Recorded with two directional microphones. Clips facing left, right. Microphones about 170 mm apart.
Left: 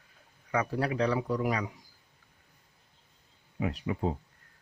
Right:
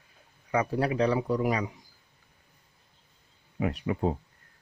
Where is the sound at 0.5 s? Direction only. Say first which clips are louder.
Right 3 dB; 20° right (ahead or behind).